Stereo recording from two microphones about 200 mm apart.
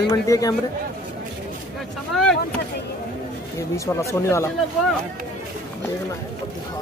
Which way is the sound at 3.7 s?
15° left (ahead or behind).